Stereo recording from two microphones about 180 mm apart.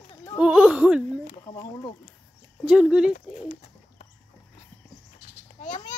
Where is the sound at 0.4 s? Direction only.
5° right (ahead or behind).